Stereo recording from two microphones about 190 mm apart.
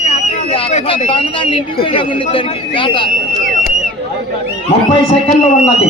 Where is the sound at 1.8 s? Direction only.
25° left (ahead or behind).